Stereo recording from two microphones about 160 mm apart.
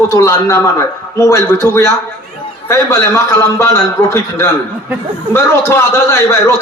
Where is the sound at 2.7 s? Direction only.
20° left (ahead or behind).